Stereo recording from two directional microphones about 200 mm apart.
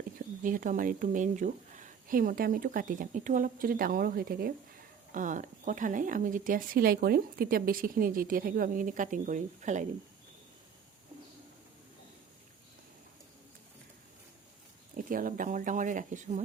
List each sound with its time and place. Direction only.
0.4 s speech: 40° right (ahead or behind)
15.1 s speech: 45° right (ahead or behind)